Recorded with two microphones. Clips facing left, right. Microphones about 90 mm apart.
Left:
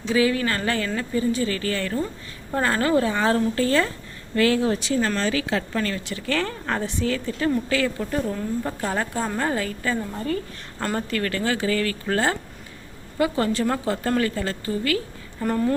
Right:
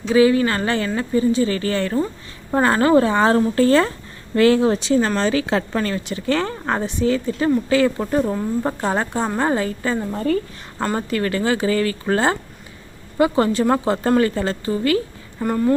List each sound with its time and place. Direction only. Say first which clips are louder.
0.1 s a woman's voice: right 6 dB; 25° right (ahead or behind)
10.9 s a woman's voice: right 4 dB; 15° right (ahead or behind)
15.4 s speech: right 3 dB; 5° right (ahead or behind)